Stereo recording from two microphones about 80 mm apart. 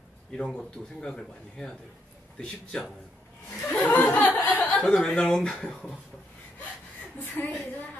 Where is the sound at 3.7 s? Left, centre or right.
Left.